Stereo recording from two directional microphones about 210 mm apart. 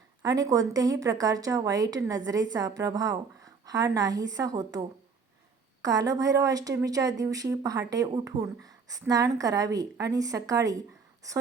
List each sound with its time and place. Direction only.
0.2 s a woman's voice: 15° right (ahead or behind)